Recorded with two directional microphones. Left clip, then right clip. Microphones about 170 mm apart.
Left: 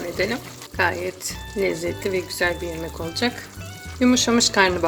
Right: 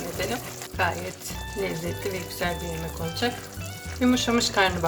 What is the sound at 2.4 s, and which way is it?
Speech, 35° left (ahead or behind).